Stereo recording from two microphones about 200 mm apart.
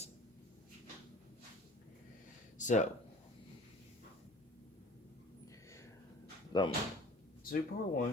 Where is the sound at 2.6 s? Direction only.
40° left (ahead or behind).